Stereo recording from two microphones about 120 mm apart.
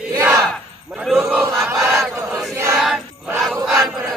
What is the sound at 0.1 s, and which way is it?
Battle cry, 25° right (ahead or behind).